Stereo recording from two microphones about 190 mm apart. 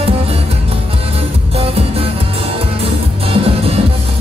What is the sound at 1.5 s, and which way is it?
Music, 30° right (ahead or behind).